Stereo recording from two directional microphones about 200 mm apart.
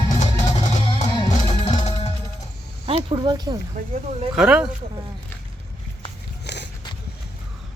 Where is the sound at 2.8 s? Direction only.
25° right (ahead or behind).